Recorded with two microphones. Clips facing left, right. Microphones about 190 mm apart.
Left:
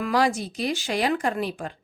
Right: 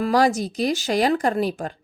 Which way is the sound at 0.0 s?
40° right (ahead or behind).